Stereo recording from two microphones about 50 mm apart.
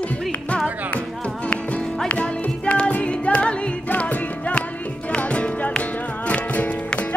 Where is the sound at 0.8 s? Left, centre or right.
Left.